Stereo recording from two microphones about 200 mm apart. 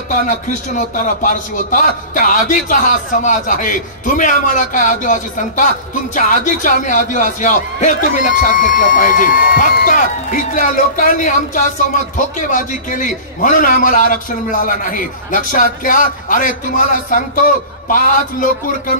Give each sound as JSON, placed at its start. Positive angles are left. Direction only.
{"t": 0.1, "sound": "a man's voice", "side_deg": 40}